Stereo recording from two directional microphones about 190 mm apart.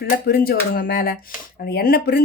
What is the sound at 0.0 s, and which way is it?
A woman's voice, 55° left (ahead or behind).